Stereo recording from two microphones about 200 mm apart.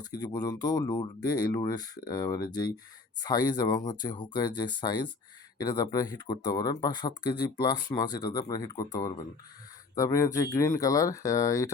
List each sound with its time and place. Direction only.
0.0 s speech: 20° left (ahead or behind)